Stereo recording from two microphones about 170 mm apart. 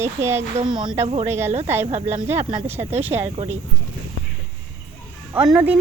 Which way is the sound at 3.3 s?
35° right (ahead or behind).